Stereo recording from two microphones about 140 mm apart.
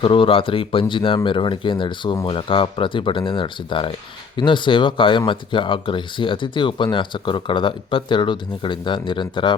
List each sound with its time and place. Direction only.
0.0 s speech: 40° left (ahead or behind)